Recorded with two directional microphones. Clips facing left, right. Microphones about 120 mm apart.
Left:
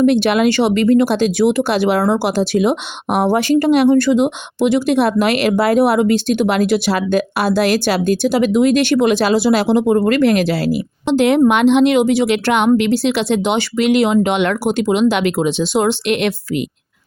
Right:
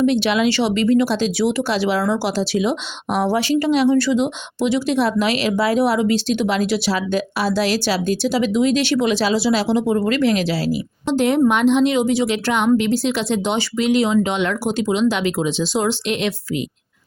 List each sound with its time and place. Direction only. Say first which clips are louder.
0.0 s a woman's voice: left 4 dB; 55° left (ahead or behind)